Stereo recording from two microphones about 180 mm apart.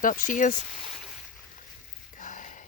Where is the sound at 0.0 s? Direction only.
45° left (ahead or behind).